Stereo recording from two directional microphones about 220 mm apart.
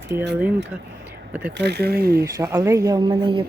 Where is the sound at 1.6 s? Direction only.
50° right (ahead or behind).